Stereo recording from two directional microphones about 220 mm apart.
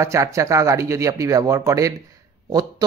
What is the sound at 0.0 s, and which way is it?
Speech, 15° right (ahead or behind).